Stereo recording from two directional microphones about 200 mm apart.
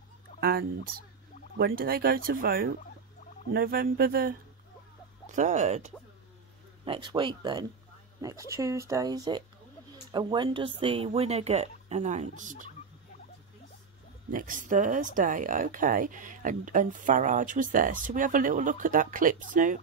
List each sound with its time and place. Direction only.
0.4 s speech: 45° right (ahead or behind)
6.8 s speech: 25° right (ahead or behind)
14.3 s speech: 40° right (ahead or behind)